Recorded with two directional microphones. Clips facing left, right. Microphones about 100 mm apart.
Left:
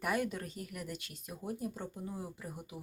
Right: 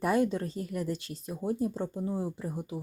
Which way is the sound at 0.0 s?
30° right (ahead or behind).